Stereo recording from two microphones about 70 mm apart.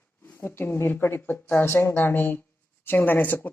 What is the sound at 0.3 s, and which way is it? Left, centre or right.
Speech, left.